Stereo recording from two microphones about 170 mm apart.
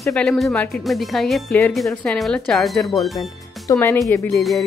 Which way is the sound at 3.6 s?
15° left (ahead or behind).